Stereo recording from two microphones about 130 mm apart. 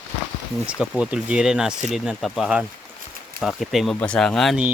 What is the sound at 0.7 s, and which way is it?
Speech, 5° right (ahead or behind).